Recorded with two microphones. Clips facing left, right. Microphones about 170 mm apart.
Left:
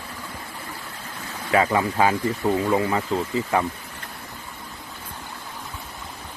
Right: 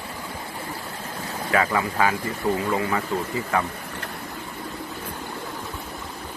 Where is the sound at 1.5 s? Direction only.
20° left (ahead or behind).